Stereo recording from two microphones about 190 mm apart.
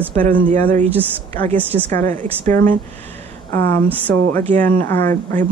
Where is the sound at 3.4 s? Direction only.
10° left (ahead or behind).